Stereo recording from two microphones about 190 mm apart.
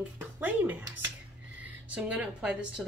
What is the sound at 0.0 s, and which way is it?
Music, 10° right (ahead or behind).